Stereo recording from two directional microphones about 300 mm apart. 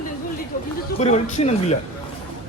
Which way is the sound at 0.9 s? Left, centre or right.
Left.